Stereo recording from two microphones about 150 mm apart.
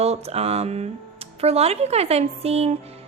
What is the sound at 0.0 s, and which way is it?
A woman's voice, 45° right (ahead or behind).